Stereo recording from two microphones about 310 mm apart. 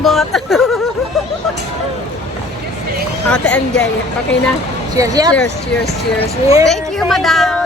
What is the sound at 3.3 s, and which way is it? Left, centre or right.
Speech, centre.